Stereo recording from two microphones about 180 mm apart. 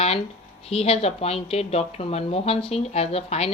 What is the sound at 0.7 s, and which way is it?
Speech, 35° left (ahead or behind).